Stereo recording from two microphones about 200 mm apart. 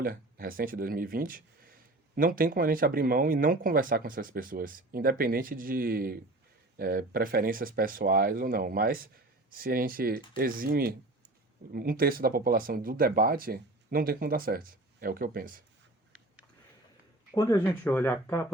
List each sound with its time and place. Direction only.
0.0 s speech: 45° right (ahead or behind)
17.3 s speech: 20° left (ahead or behind)